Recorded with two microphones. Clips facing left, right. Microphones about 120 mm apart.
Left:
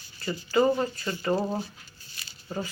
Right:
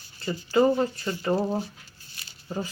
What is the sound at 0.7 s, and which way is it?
Speech, 5° right (ahead or behind).